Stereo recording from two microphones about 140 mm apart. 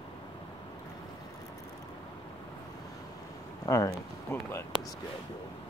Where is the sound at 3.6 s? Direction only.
25° left (ahead or behind).